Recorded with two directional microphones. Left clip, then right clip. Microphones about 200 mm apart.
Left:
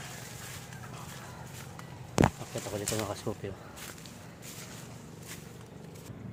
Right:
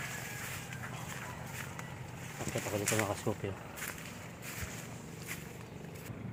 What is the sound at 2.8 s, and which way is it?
Speech, 10° left (ahead or behind).